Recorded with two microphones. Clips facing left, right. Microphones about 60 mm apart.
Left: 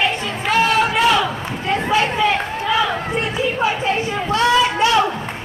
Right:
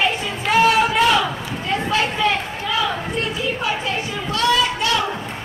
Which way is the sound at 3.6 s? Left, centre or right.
Left.